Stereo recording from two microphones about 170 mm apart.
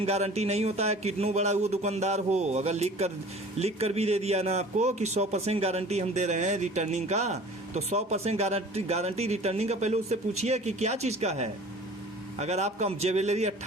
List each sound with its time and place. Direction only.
0.0 s a man's voice: 40° right (ahead or behind)